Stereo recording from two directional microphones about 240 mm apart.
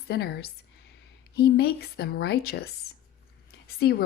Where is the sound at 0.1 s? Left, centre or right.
Left.